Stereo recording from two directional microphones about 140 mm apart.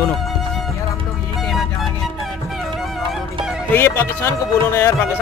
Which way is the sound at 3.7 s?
15° left (ahead or behind).